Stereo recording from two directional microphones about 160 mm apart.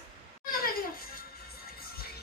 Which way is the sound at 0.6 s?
65° left (ahead or behind).